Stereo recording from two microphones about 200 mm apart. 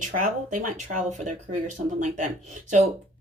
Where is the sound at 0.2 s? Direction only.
40° right (ahead or behind).